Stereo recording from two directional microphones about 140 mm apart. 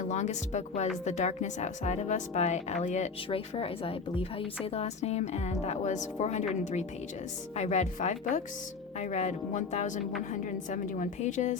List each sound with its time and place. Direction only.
0.1 s speech: 55° left (ahead or behind)
3.2 s a woman's voice: 40° left (ahead or behind)
7.5 s speech: 55° left (ahead or behind)